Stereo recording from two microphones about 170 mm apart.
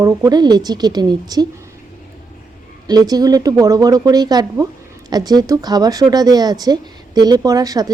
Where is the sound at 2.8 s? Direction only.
25° right (ahead or behind).